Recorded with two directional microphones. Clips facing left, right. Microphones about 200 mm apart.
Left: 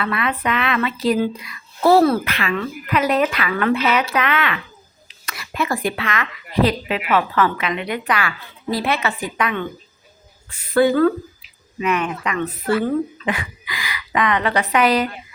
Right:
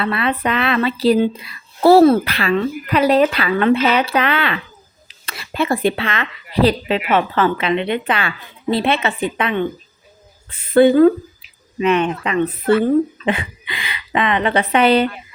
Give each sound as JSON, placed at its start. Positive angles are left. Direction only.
{"t": 0.0, "sound": "speech", "side_deg": -30}
{"t": 10.8, "sound": "a woman's voice", "side_deg": -20}